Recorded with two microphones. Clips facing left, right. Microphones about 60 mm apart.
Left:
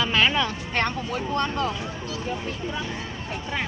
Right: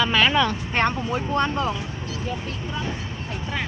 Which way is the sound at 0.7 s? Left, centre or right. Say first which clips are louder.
Right 3 dB; right.